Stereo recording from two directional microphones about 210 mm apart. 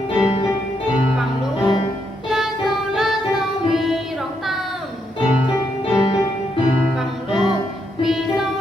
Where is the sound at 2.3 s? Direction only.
Centre (ahead or behind).